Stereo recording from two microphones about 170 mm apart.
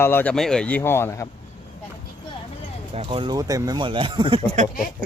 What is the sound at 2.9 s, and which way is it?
Speech, 35° right (ahead or behind).